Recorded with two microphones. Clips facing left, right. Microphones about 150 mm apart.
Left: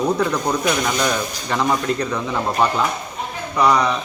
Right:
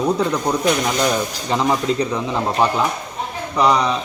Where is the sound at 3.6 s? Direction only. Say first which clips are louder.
Even; 20° right (ahead or behind).